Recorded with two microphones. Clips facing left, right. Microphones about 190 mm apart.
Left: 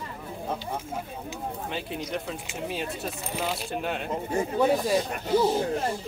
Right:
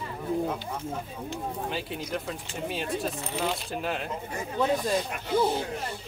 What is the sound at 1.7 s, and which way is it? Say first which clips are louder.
Speech: even; centre (ahead or behind).